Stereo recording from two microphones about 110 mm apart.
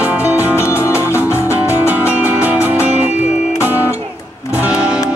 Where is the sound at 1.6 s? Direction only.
15° right (ahead or behind).